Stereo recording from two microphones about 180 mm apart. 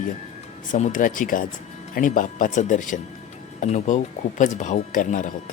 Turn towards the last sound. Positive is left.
turn(degrees=45)  # may be behind; listen again after turning